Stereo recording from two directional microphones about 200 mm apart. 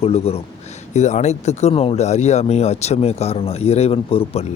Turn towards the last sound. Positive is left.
turn(degrees=30)  # may be behind; listen again after turning